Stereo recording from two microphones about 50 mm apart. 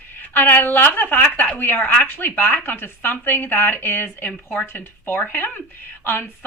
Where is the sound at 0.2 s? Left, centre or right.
Left.